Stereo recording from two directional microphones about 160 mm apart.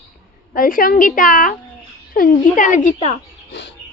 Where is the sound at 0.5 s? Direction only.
60° left (ahead or behind).